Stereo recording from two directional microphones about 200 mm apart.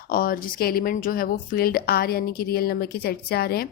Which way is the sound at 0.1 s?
45° left (ahead or behind).